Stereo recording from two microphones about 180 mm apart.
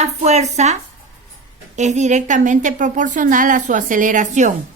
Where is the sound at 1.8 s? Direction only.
40° right (ahead or behind).